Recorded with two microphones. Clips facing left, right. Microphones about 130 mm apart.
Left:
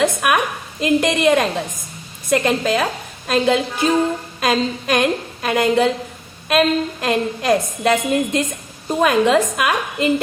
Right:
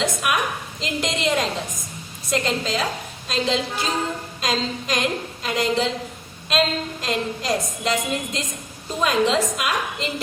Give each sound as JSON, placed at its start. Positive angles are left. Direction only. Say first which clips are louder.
{"t": 0.0, "sound": "a woman's voice", "louder": "left 6 dB", "side_deg": 60}